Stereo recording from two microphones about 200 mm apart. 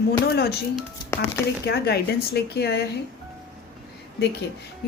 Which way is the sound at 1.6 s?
55° left (ahead or behind).